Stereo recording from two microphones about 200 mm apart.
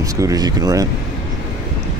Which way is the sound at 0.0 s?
15° right (ahead or behind).